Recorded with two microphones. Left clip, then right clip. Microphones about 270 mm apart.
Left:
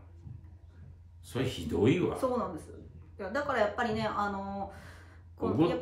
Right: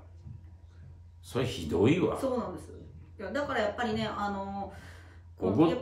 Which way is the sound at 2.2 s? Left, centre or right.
Centre.